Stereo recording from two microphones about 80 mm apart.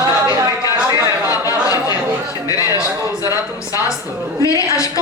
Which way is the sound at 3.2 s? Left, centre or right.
Left.